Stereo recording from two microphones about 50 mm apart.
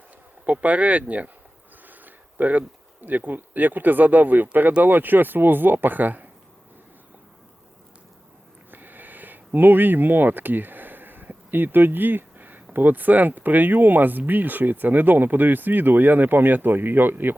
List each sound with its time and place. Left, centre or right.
0.4 s speech: right
8.7 s a sound: right
12.7 s speech: right